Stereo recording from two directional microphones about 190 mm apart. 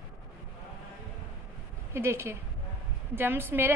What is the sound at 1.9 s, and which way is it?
A woman's voice, 15° right (ahead or behind).